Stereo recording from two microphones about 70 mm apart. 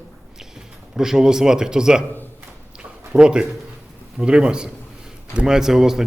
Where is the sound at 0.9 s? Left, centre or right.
Centre.